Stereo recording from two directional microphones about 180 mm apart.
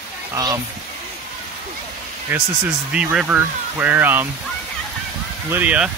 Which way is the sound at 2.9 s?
5° right (ahead or behind).